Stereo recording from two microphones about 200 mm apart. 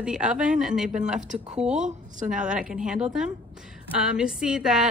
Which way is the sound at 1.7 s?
35° right (ahead or behind).